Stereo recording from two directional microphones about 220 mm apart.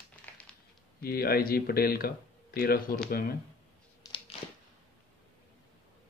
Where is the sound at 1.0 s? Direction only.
45° left (ahead or behind).